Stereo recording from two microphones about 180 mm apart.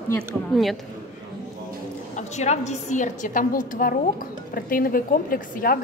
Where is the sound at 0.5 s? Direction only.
Centre (ahead or behind).